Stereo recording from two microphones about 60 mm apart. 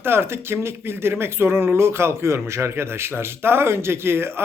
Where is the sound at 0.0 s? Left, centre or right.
Right.